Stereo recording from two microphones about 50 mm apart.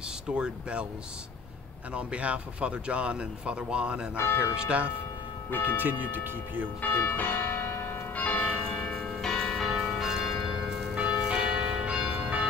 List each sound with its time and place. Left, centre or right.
0.3 s speech: right
2.0 s speech: right
4.2 s speech: left
4.6 s speech: right
5.5 s speech: left
5.8 s speech: right
7.1 s church bell: left
8.2 s church bell: left
8.9 s church bell: centre
9.7 s church bell: centre
11.0 s church bell: centre